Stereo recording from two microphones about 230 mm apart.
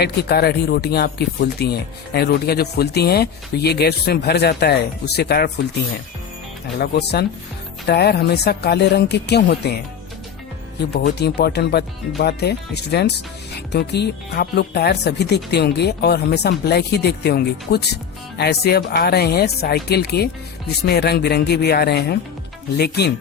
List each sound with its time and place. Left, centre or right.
0.0 s speech: left
6.7 s speech: left
10.9 s speech: left